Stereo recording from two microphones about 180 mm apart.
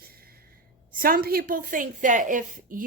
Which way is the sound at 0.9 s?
55° right (ahead or behind).